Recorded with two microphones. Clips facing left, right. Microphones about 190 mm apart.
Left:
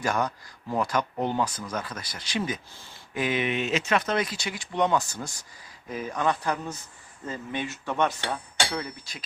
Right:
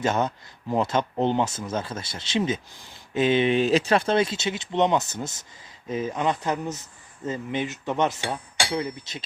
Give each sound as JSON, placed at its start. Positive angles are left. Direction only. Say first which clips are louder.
{"t": 0.0, "sound": "speech", "louder": "right 3 dB", "side_deg": -25}
{"t": 8.7, "sound": "speech", "louder": "right 5 dB", "side_deg": -25}